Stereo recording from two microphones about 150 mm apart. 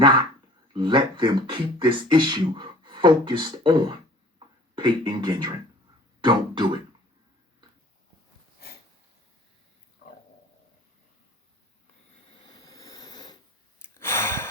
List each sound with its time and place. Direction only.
0.0 s speech: 30° right (ahead or behind)
12.4 s a sound: 25° left (ahead or behind)
14.0 s sigh: 15° left (ahead or behind)